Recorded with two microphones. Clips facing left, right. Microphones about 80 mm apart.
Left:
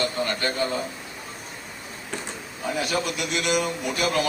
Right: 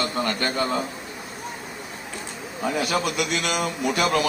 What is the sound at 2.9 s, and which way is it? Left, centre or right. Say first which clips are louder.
Speech: right 3 dB; right.